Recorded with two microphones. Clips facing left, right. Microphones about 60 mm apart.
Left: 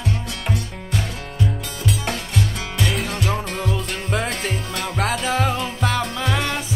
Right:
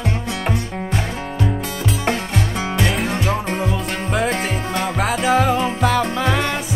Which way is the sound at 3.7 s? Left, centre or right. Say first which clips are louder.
Right 3 dB; centre.